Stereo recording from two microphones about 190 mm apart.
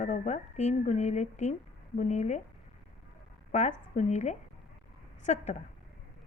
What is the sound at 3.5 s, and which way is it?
Speech, 40° left (ahead or behind).